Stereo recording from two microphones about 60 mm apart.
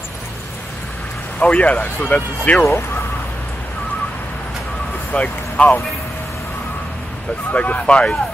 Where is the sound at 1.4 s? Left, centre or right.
Left.